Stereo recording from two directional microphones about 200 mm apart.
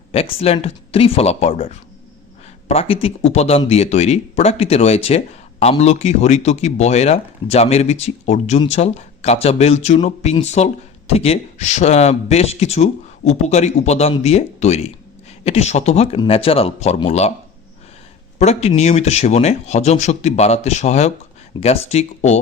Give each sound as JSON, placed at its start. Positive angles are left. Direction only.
{"t": 0.1, "sound": "speech", "side_deg": 30}
{"t": 18.3, "sound": "speech", "side_deg": 30}